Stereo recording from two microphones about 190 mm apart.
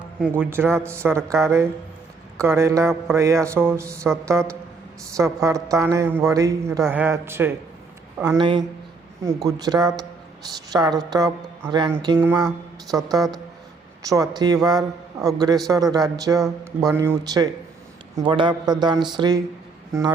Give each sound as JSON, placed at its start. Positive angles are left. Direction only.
{"t": 0.3, "sound": "a woman's voice", "side_deg": -10}
{"t": 8.4, "sound": "a woman's voice", "side_deg": -25}